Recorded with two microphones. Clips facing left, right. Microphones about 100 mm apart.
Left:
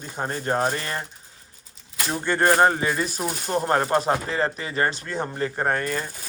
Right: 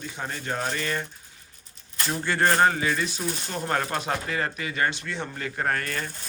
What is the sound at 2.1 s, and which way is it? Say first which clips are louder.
Speech: left 3 dB; 20° left (ahead or behind).